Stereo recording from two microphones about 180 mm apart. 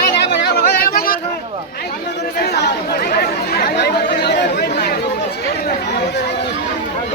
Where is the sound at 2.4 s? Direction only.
65° left (ahead or behind).